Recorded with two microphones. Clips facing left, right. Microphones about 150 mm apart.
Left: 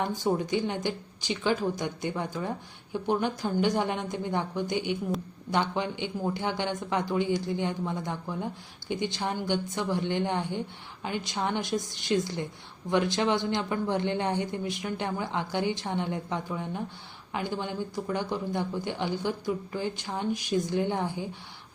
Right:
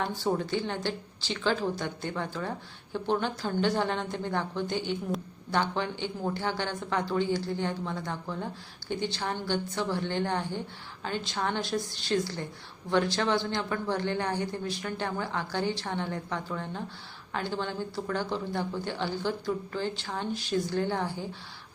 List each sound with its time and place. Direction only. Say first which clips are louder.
0.0 s a man's voice: left 2 dB; 15° left (ahead or behind)